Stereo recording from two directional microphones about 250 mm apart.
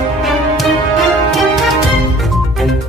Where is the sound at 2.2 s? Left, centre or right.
Centre.